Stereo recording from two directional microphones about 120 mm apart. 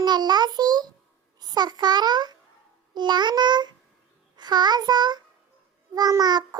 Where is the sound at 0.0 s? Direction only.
35° right (ahead or behind).